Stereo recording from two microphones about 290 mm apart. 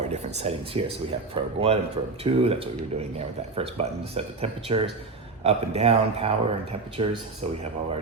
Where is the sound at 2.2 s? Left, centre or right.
Centre.